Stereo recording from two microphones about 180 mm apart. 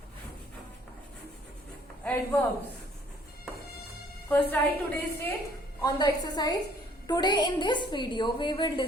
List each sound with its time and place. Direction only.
2.0 s a woman's voice: 10° left (ahead or behind)
4.3 s a woman's voice: 10° left (ahead or behind)
5.8 s a woman's voice: 25° left (ahead or behind)